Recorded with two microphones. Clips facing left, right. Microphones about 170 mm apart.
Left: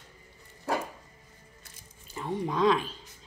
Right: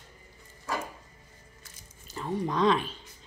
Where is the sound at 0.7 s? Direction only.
60° left (ahead or behind).